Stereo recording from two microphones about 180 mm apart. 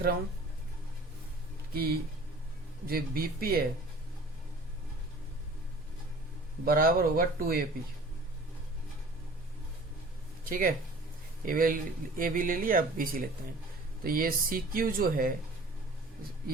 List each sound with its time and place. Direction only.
1.7 s speech: 60° right (ahead or behind)
6.7 s speech: 55° right (ahead or behind)
10.5 s speech: 50° right (ahead or behind)